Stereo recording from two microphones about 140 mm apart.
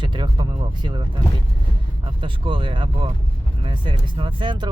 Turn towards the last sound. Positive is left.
turn(degrees=-35)  # may be behind; listen again after turning